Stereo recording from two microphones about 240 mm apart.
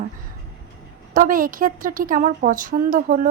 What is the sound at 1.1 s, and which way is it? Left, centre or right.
A woman's voice, right.